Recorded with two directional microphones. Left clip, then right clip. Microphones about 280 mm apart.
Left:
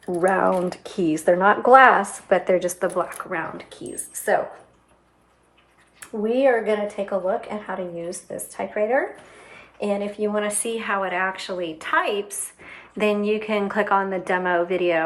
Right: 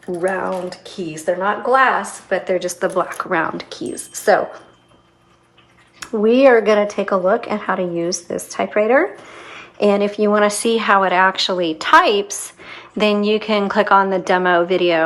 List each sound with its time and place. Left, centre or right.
0.2 s speech: centre
6.0 s speech: centre